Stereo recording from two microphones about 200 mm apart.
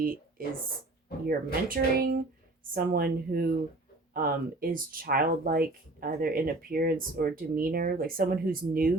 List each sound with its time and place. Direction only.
0.4 s speech: 45° right (ahead or behind)